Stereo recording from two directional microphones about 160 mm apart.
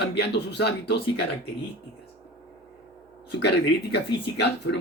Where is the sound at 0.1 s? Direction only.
90° left.